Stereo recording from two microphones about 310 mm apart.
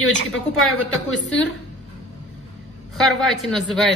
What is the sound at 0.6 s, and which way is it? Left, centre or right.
Speech, centre.